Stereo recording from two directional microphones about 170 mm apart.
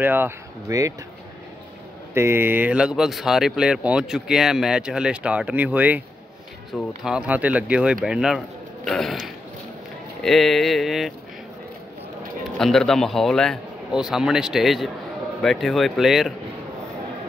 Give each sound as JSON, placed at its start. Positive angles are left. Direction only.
{"t": 0.0, "sound": "speech", "side_deg": -10}
{"t": 2.1, "sound": "speech", "side_deg": -15}
{"t": 12.5, "sound": "speech", "side_deg": 0}